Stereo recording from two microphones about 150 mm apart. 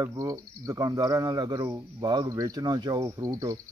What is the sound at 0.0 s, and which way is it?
Speech, 20° right (ahead or behind).